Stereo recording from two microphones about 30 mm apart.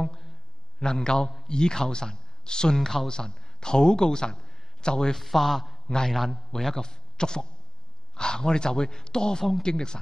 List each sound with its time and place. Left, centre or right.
0.7 s speech: left
3.1 s speech: left
5.1 s a man's voice: centre; by 9.9 s left